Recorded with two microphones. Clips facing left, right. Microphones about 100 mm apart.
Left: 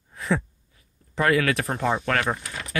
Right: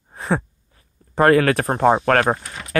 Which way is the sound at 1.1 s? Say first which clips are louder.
Right 7 dB; 45° right (ahead or behind).